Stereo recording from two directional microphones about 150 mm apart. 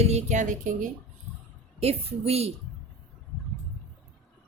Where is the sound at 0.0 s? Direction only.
45° right (ahead or behind).